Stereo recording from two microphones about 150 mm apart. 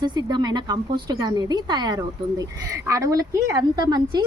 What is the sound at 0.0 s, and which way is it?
A woman's voice, 30° right (ahead or behind).